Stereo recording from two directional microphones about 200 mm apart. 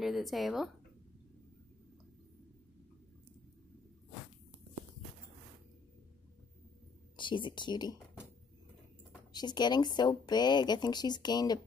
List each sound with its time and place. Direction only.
0.0 s speech: centre (ahead or behind)
7.2 s speech: 25° left (ahead or behind)
9.3 s speech: 20° left (ahead or behind)